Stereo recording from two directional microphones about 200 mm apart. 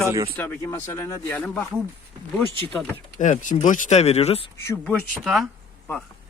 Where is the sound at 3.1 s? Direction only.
40° left (ahead or behind).